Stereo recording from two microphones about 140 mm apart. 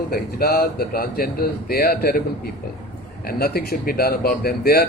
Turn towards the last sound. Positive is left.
turn(degrees=90)